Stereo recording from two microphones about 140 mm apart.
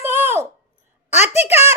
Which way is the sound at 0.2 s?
15° right (ahead or behind).